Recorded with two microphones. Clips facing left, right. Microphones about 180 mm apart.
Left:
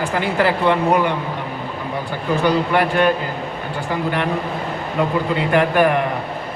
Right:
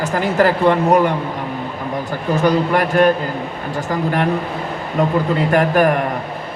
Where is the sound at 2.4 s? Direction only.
40° right (ahead or behind).